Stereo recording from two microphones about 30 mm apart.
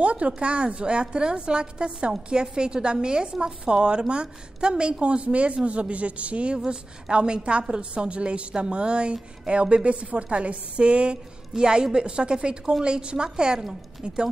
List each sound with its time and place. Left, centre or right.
0.0 s a woman's voice: right
6.5 s a woman's voice: right
11.5 s speech: right